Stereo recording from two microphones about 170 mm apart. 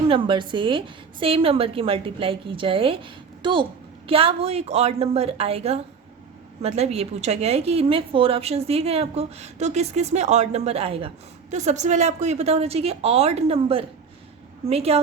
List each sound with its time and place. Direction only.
0.1 s a woman's voice: 30° right (ahead or behind)